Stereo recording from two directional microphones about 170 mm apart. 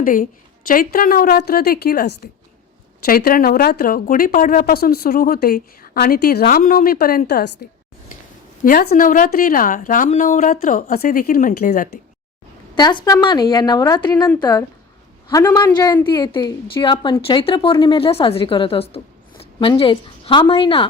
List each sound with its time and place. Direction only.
0.0 s a woman's voice: 55° left (ahead or behind); by 7.7 s 70° left (ahead or behind)
8.6 s a woman's voice: 55° left (ahead or behind)
12.7 s a woman's voice: 25° left (ahead or behind)